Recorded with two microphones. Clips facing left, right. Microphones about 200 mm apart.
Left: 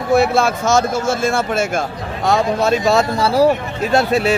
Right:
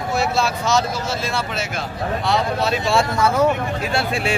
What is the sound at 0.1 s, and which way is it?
Speech, 55° left (ahead or behind).